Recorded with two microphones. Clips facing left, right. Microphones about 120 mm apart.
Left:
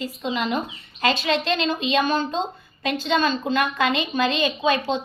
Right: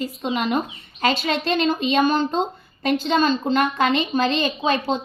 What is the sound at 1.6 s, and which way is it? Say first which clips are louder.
A woman's voice: right 3 dB; 50° right (ahead or behind).